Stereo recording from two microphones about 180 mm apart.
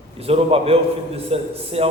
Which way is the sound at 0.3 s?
35° right (ahead or behind).